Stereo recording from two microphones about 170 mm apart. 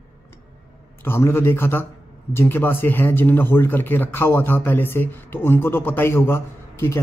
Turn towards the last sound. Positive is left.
turn(degrees=15)  # may be behind; listen again after turning